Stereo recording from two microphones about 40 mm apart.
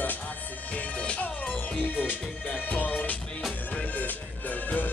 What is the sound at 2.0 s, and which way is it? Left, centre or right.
Music, left.